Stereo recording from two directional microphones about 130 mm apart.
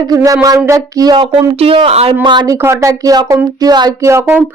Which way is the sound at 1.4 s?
45° right (ahead or behind).